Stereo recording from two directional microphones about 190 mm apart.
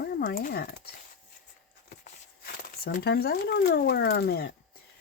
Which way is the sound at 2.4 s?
55° left (ahead or behind).